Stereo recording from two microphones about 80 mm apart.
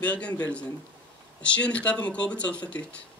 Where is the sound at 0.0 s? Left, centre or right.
Centre.